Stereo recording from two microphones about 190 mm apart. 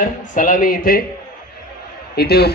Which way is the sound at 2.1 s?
55° left (ahead or behind).